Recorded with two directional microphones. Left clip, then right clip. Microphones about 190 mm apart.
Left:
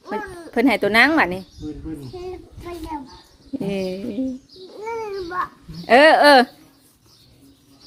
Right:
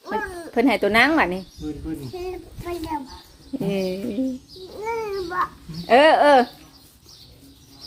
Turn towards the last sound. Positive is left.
turn(degrees=30)  # may be behind; listen again after turning